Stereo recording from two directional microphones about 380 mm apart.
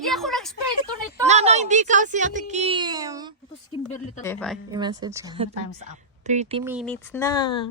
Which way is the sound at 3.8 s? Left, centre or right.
Centre.